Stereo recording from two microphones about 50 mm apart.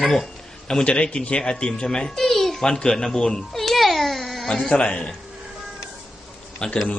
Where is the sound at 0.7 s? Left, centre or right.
Centre.